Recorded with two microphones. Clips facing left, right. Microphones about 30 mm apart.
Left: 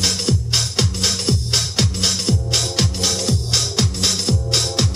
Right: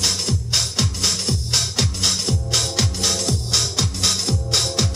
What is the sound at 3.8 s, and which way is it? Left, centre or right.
Music, centre.